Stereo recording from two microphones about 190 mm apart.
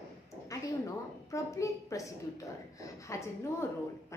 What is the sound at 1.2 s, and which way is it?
Speech, 15° left (ahead or behind).